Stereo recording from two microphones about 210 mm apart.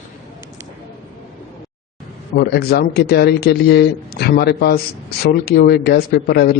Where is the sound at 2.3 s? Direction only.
50° left (ahead or behind).